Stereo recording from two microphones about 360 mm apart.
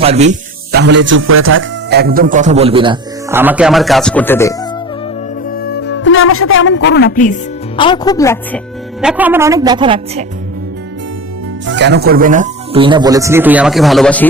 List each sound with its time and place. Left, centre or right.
0.0 s speech: centre
5.5 s music: left
7.8 s speech: centre
11.6 s speech: right; by 14.3 s centre